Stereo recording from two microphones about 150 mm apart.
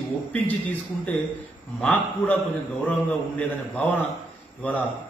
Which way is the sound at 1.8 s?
10° left (ahead or behind).